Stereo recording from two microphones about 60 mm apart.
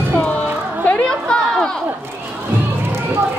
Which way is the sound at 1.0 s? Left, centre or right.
Centre.